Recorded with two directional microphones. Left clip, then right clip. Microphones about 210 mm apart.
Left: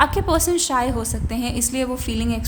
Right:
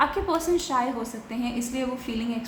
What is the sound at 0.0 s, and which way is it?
A woman's voice, 50° left (ahead or behind).